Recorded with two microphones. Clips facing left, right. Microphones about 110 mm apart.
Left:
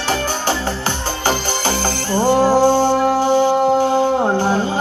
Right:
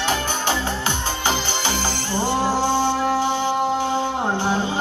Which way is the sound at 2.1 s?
40° left (ahead or behind).